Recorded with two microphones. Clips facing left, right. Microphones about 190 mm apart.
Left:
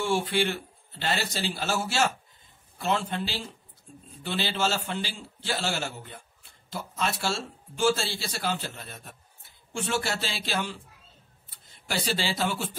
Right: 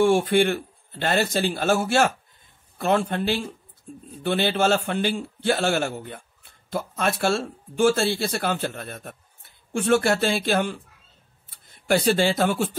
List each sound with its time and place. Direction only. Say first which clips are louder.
0.0 s a man's voice: right 8 dB; 55° right (ahead or behind)